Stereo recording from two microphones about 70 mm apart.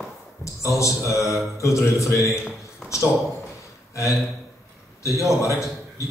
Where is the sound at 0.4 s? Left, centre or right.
Left.